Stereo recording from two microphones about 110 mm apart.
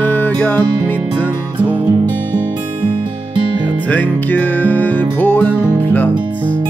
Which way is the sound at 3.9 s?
15° left (ahead or behind).